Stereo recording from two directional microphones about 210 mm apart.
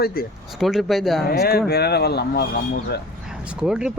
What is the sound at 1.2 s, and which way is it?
Speech, 45° left (ahead or behind).